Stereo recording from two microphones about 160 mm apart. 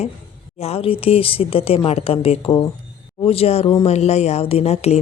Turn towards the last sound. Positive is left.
turn(degrees=40)  # may be behind; listen again after turning